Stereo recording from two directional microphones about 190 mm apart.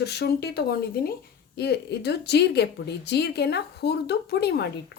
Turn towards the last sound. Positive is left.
turn(degrees=60)  # may be behind; listen again after turning